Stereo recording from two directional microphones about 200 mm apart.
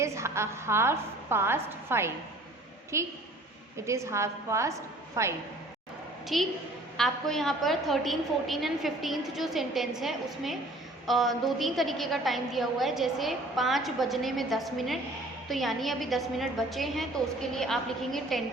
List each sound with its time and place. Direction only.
0.0 s a woman's voice: 15° right (ahead or behind)
6.2 s a woman's voice: centre (ahead or behind)